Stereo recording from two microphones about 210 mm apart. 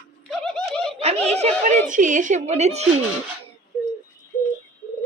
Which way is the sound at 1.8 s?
40° right (ahead or behind).